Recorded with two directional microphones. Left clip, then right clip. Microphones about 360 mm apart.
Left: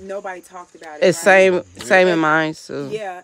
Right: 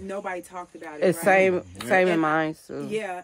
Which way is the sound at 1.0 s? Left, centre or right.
Left.